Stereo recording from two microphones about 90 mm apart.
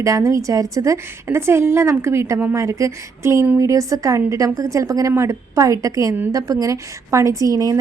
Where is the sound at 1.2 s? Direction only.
25° right (ahead or behind).